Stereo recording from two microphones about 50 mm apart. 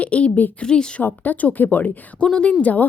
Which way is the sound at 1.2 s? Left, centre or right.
Left.